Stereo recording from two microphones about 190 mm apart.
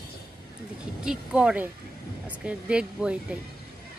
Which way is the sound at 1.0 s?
5° right (ahead or behind).